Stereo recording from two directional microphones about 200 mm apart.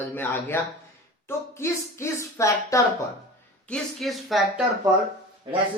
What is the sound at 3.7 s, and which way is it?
Speech, centre (ahead or behind).